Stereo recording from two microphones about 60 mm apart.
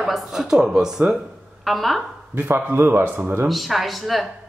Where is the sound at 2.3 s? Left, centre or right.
Right.